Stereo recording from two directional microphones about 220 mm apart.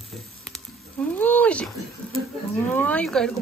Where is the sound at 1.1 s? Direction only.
5° left (ahead or behind).